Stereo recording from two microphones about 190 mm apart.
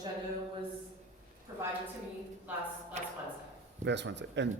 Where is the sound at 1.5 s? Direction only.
15° right (ahead or behind).